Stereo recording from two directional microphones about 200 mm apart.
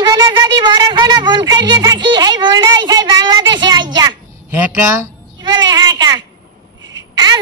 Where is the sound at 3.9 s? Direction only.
20° right (ahead or behind).